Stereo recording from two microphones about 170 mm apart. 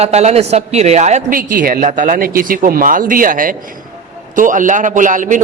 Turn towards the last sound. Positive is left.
turn(degrees=-50)  # may be behind; listen again after turning